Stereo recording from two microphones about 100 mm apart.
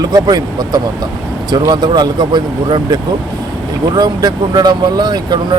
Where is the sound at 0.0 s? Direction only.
45° right (ahead or behind).